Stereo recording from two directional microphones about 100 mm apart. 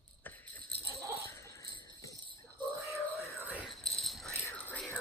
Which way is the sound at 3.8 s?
Centre (ahead or behind).